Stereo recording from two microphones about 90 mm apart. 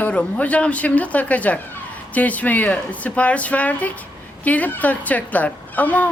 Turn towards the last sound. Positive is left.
turn(degrees=20)  # may be behind; listen again after turning